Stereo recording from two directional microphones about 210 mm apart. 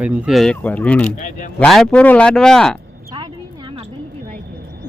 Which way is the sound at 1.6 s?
5° left (ahead or behind).